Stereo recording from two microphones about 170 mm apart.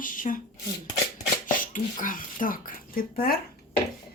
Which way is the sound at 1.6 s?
50° left (ahead or behind).